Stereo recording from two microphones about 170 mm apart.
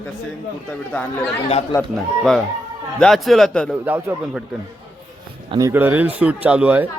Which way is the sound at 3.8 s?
10° right (ahead or behind).